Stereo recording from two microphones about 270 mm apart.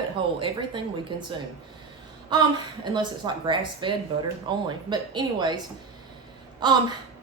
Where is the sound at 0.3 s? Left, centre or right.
Centre.